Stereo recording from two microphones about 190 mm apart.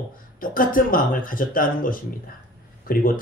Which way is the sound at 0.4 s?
45° left (ahead or behind).